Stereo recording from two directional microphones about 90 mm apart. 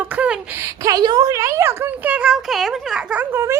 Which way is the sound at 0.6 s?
40° right (ahead or behind).